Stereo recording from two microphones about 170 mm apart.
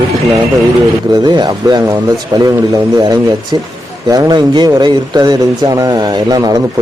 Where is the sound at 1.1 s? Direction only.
25° right (ahead or behind).